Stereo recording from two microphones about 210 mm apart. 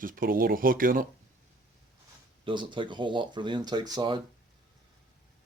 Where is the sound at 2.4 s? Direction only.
25° right (ahead or behind).